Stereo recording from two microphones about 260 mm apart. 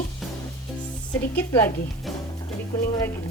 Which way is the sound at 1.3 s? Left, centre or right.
Centre.